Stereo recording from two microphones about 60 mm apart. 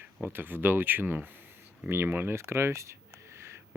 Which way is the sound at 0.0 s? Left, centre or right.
Right.